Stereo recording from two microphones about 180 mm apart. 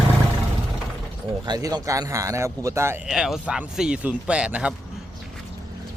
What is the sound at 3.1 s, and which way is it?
Speech, centre (ahead or behind).